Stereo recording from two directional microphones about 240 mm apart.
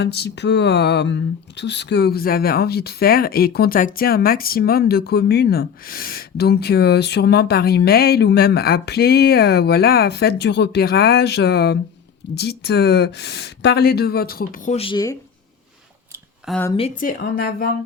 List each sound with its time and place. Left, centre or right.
0.0 s speech: left; by 15.1 s centre
16.5 s a woman's voice: centre
16.7 s speech: left